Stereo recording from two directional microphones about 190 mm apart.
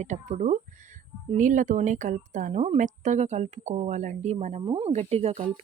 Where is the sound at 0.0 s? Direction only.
35° right (ahead or behind).